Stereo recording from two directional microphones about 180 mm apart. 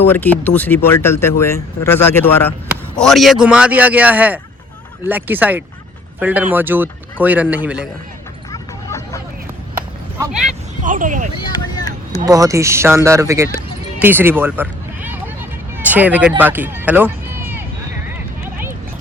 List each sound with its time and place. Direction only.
0.0 s speech: 10° left (ahead or behind)
3.0 s speech: centre (ahead or behind)
8.5 s a sound: 15° left (ahead or behind)
10.8 s speech: 45° right (ahead or behind)
11.3 s vehicle: 25° left (ahead or behind)
12.2 s speech: 20° right (ahead or behind)